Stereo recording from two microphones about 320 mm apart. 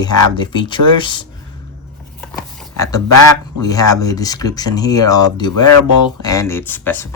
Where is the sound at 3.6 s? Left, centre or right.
Centre.